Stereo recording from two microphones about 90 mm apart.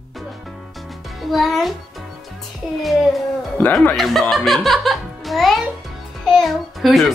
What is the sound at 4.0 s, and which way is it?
A child's voice, centre (ahead or behind).